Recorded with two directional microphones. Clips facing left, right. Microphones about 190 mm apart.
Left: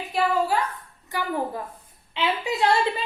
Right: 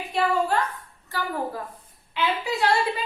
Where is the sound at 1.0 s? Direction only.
15° left (ahead or behind).